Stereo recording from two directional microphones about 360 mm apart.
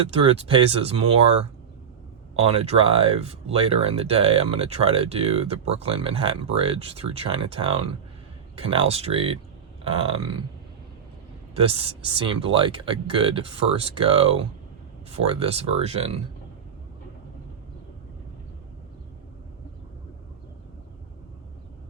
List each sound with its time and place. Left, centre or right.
0.3 s speech: centre
2.4 s speech: centre
11.5 s speech: centre